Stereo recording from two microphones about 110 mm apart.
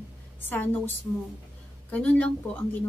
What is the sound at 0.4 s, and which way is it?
A woman's voice, 20° left (ahead or behind).